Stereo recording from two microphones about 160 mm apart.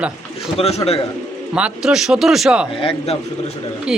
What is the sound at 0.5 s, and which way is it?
Speech, 40° left (ahead or behind).